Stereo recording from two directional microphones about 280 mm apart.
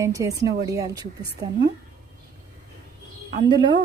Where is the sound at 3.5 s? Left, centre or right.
Centre.